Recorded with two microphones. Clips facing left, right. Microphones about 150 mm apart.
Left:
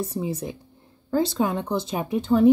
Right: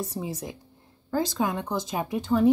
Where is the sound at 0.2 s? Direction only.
25° left (ahead or behind).